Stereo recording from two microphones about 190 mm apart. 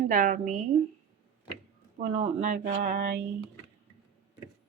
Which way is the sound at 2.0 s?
30° right (ahead or behind).